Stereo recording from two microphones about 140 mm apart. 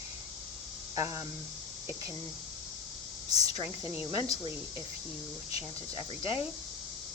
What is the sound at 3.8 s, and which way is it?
Speech, 40° left (ahead or behind).